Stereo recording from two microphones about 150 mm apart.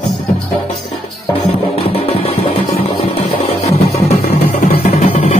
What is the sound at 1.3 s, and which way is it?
Music, 40° left (ahead or behind).